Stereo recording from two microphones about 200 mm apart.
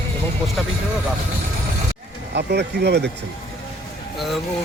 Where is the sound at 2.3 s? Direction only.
55° right (ahead or behind).